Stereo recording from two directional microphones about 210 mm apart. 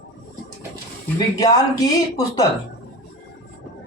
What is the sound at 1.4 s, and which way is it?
Speech, 15° left (ahead or behind).